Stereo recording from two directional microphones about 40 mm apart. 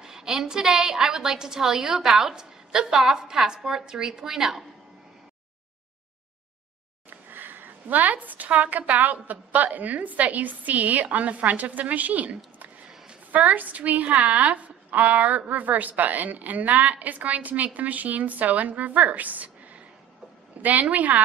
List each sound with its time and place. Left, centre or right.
0.0 s a woman's voice: centre
7.1 s a woman's voice: right
20.5 s a sound: right
20.9 s a woman's voice: right